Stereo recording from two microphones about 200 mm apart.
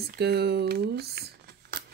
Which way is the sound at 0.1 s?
55° right (ahead or behind).